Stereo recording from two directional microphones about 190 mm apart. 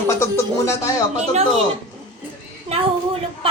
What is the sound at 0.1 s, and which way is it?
Speech, 15° left (ahead or behind).